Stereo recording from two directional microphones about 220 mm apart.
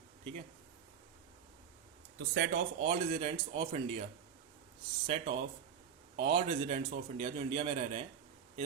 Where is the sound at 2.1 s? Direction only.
45° right (ahead or behind).